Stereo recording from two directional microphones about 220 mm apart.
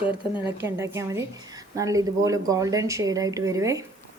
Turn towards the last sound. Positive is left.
turn(degrees=-15)  # may be behind; listen again after turning